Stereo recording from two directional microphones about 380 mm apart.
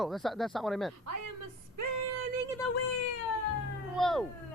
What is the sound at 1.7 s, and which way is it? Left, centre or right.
Female singing, right.